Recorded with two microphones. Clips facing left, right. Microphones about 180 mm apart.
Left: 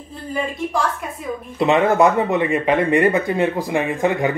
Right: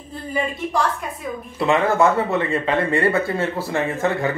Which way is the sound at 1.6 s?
20° left (ahead or behind).